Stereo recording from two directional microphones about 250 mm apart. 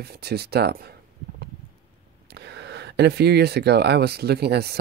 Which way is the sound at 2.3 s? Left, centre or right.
Right.